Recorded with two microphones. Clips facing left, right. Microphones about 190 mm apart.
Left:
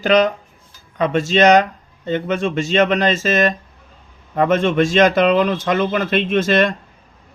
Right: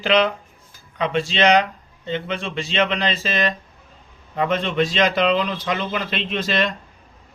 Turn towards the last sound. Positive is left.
turn(degrees=50)  # may be behind; listen again after turning